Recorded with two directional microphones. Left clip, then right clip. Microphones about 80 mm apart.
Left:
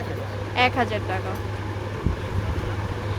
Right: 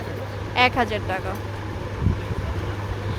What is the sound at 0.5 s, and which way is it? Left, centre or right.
Speech, right.